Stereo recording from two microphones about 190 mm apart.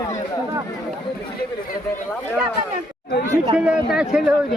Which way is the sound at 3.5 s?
5° right (ahead or behind).